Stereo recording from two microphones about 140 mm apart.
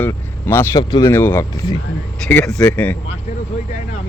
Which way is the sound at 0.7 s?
25° left (ahead or behind).